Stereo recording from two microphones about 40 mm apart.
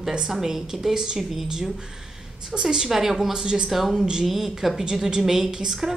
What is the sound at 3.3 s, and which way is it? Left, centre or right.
Speech, centre.